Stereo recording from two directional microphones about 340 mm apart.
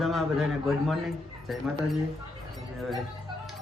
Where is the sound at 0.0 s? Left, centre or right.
Centre.